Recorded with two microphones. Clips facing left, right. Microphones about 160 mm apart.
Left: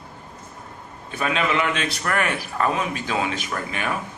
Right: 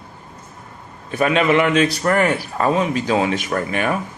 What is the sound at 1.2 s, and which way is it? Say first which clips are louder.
A man's voice: right 7 dB; 40° right (ahead or behind).